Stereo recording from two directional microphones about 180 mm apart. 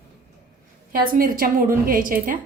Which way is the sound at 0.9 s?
55° right (ahead or behind).